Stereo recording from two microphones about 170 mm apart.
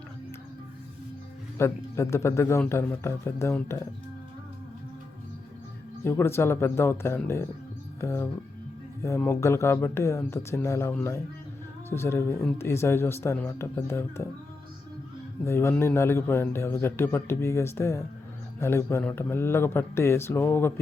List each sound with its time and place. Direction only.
1.5 s a man's voice: 15° left (ahead or behind)
6.1 s a man's voice: 15° left (ahead or behind)
15.4 s a man's voice: 15° left (ahead or behind)